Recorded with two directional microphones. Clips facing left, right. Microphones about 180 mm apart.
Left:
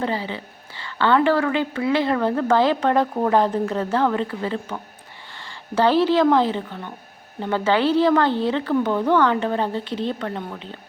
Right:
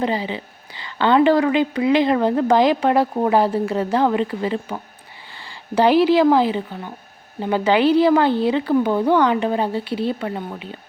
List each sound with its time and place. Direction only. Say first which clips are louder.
0.0 s a woman's voice: right 3 dB; 15° right (ahead or behind)